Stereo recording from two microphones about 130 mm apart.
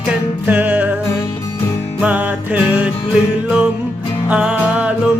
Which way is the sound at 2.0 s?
10° right (ahead or behind).